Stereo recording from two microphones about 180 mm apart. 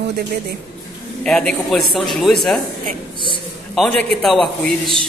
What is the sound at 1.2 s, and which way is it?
Speech, 5° left (ahead or behind).